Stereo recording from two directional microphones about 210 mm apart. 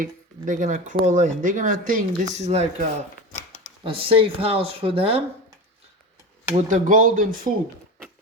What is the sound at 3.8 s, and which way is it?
Speech, 25° right (ahead or behind).